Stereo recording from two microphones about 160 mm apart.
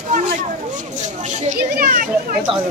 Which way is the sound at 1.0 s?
50° right (ahead or behind).